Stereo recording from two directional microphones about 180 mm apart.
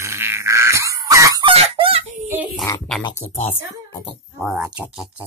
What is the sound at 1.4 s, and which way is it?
Fowl, 30° right (ahead or behind).